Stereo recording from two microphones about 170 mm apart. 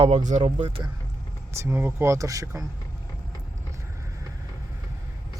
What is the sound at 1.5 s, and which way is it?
Speech, 15° right (ahead or behind).